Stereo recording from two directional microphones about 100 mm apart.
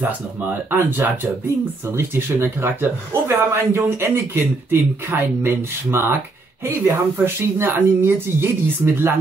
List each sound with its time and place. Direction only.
0.0 s speech: 20° right (ahead or behind)